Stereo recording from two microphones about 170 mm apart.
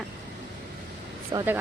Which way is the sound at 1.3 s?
30° right (ahead or behind).